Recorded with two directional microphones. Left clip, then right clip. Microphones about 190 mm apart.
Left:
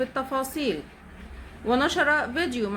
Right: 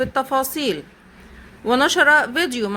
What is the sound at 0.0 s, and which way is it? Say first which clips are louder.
Speech: right 7 dB; 35° right (ahead or behind).